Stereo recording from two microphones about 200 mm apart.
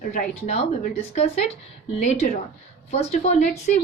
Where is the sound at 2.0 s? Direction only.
35° left (ahead or behind).